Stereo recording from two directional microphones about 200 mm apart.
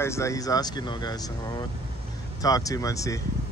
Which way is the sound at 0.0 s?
15° left (ahead or behind).